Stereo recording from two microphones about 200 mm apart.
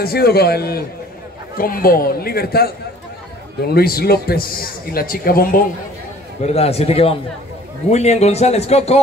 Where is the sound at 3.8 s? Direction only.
50° left (ahead or behind).